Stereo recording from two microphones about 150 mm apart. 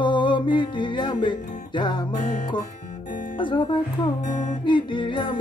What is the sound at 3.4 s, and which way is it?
Music, 35° left (ahead or behind).